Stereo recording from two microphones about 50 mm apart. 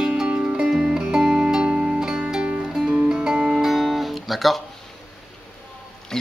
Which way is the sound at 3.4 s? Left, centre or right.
Centre.